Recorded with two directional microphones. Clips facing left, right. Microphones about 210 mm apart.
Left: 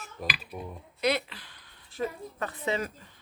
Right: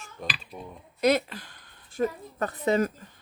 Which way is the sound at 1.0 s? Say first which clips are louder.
Right 5 dB; 45° right (ahead or behind).